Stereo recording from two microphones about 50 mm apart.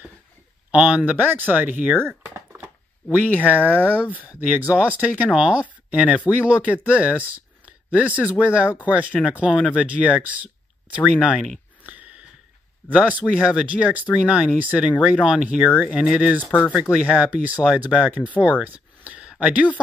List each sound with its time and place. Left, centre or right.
0.7 s speech: right
1.1 s speech: right
2.0 s speech: right
3.1 s speech: right
11.8 s wheeze: right
12.9 s speech: right